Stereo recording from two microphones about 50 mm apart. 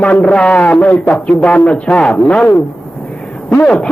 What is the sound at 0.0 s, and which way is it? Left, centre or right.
Speech, left.